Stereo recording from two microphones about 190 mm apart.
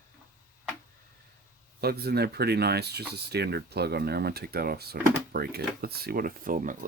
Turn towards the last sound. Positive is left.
turn(degrees=-45)  # may be behind; listen again after turning